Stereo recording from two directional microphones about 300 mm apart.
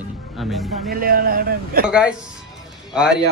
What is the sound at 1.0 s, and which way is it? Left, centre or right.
Speech, right.